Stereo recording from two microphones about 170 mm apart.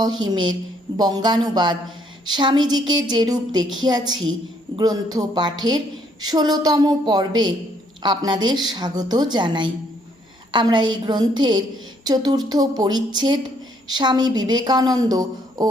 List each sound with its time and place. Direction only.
0.0 s a woman's voice: 25° right (ahead or behind)